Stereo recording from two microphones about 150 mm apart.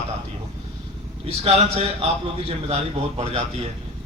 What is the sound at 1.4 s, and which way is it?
A man's voice, 45° right (ahead or behind).